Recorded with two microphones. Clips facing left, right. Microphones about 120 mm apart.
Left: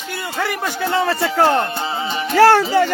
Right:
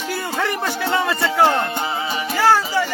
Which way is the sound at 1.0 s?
30° left (ahead or behind).